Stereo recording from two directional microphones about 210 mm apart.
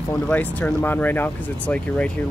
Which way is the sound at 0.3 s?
5° left (ahead or behind).